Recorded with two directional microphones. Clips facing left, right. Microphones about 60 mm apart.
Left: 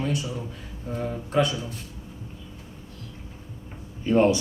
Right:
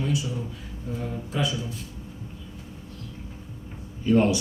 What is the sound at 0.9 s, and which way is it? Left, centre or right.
Speech, left.